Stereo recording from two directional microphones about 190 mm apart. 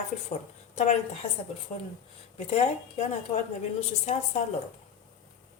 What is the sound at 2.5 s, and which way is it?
Speech, 35° left (ahead or behind).